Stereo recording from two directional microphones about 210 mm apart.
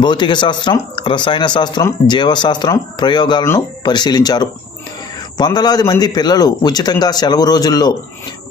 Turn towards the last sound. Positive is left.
turn(degrees=20)  # may be behind; listen again after turning